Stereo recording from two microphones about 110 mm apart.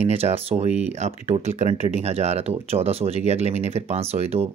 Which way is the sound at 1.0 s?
90° right.